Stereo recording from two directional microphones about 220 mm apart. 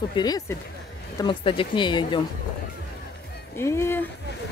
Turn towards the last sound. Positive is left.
turn(degrees=10)  # may be behind; listen again after turning